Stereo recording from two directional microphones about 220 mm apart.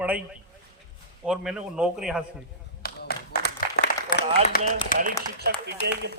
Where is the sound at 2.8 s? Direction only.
45° left (ahead or behind).